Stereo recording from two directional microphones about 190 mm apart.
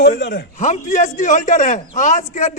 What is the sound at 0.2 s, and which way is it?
Speech, 60° left (ahead or behind).